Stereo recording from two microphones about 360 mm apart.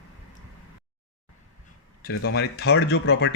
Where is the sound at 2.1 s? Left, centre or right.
Left.